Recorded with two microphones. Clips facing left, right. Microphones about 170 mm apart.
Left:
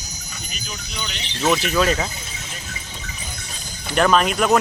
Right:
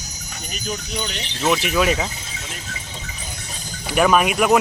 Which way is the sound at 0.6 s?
40° right (ahead or behind).